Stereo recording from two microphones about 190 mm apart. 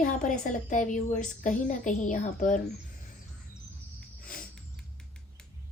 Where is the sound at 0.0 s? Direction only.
45° left (ahead or behind).